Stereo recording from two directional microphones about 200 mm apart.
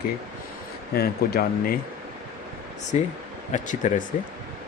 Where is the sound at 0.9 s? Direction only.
50° left (ahead or behind).